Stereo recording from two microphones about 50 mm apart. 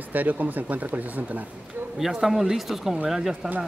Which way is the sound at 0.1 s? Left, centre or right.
Right.